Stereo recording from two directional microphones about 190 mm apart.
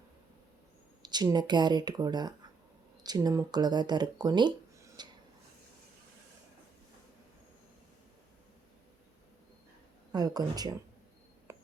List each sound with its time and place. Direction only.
1.0 s speech: 20° right (ahead or behind)
10.1 s speech: 20° right (ahead or behind)
11.5 s a sound: 15° right (ahead or behind)